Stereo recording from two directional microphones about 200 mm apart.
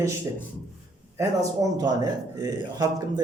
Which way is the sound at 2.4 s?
20° right (ahead or behind).